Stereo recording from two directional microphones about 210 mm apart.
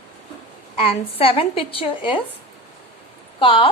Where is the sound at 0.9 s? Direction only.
25° left (ahead or behind).